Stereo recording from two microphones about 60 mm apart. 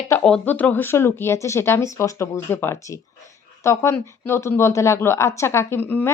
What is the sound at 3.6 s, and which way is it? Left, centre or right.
A woman's voice, left.